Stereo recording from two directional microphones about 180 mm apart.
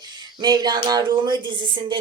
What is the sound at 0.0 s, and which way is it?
Speech, 25° right (ahead or behind).